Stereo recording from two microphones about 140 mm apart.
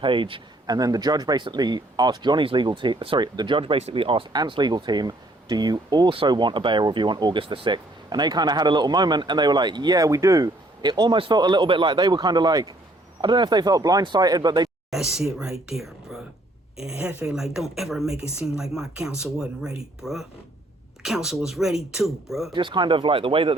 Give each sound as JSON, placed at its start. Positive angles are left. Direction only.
{"t": 0.0, "sound": "speech", "side_deg": -35}
{"t": 14.8, "sound": "a woman's voice", "side_deg": -5}
{"t": 22.5, "sound": "speech", "side_deg": -35}